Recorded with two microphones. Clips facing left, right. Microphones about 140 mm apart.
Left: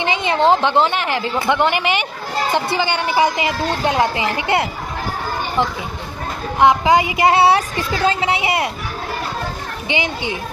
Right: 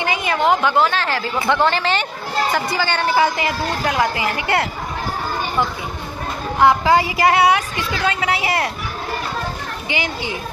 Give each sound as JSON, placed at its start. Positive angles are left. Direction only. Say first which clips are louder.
{"t": 0.0, "sound": "a woman's voice", "louder": "left 2 dB", "side_deg": 25}
{"t": 6.6, "sound": "a woman's voice", "louder": "left 1 dB", "side_deg": 15}
{"t": 9.8, "sound": "a woman's voice", "louder": "left 3 dB", "side_deg": 20}